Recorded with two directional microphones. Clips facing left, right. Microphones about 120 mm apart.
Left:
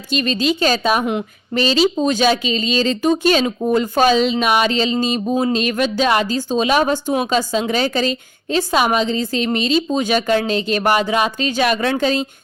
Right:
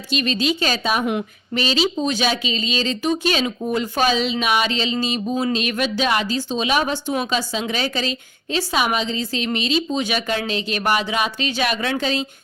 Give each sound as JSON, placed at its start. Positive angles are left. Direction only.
{"t": 0.1, "sound": "speech", "side_deg": 40}
{"t": 1.0, "sound": "a woman's voice", "side_deg": 35}